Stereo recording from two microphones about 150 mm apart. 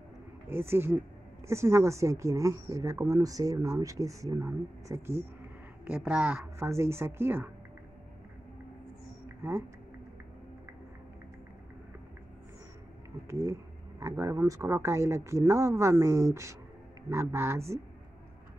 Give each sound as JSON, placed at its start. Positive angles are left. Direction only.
{"t": 0.5, "sound": "speech", "side_deg": -15}
{"t": 5.9, "sound": "speech", "side_deg": -10}
{"t": 9.4, "sound": "speech", "side_deg": -15}
{"t": 13.3, "sound": "speech", "side_deg": -20}